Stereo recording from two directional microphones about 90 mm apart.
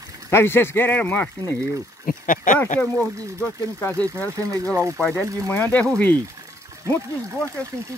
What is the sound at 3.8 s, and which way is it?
Speech, 20° left (ahead or behind).